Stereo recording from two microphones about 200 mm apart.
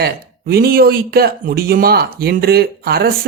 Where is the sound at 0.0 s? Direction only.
50° right (ahead or behind).